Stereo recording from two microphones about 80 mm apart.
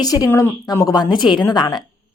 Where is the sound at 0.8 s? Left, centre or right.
Left.